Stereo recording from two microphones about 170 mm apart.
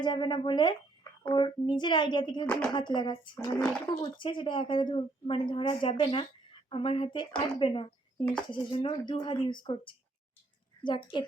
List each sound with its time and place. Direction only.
0.0 s speech: 25° left (ahead or behind)